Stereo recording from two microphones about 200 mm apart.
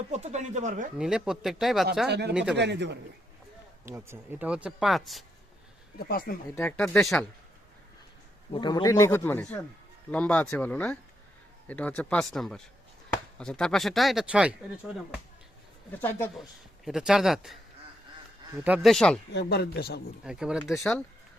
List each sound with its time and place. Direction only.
0.1 s speech: 35° right (ahead or behind)
0.9 s speech: 5° right (ahead or behind)
2.0 s speech: 55° right (ahead or behind)
2.3 s speech: 5° right (ahead or behind)
2.6 s speech: 60° right (ahead or behind)
3.8 s speech: 15° right (ahead or behind)
6.0 s speech: 50° left (ahead or behind)
6.6 s speech: 10° left (ahead or behind)
8.5 s speech: 20° left (ahead or behind); by 14.5 s 5° right (ahead or behind)
15.9 s speech: 10° left (ahead or behind)
16.4 s speech: centre (ahead or behind)
18.6 s speech: 5° right (ahead or behind)
19.3 s speech: 55° left (ahead or behind)
20.2 s speech: 5° right (ahead or behind)